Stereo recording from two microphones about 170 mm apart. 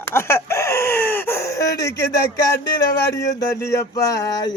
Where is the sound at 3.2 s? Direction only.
20° left (ahead or behind).